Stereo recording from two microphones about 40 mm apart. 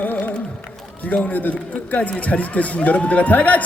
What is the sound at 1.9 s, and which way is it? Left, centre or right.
Speech, left.